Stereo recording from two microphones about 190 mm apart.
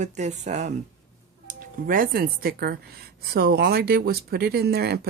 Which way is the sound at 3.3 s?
55° right (ahead or behind).